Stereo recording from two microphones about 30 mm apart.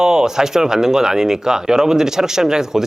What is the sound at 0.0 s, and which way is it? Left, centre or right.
Speech, right.